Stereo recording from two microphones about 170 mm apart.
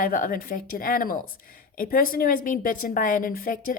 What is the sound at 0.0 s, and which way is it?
A woman's voice, 55° left (ahead or behind).